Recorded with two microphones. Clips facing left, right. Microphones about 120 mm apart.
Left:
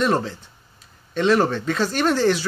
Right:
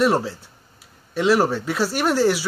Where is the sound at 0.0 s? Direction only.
10° right (ahead or behind).